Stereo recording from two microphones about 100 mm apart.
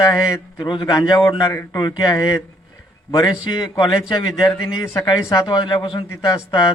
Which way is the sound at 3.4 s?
45° left (ahead or behind).